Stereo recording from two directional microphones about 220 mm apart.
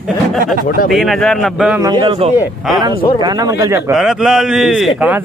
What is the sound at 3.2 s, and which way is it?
Speech, 15° right (ahead or behind).